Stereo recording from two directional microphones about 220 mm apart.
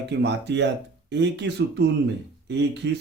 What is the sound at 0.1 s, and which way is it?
Speech, 50° right (ahead or behind).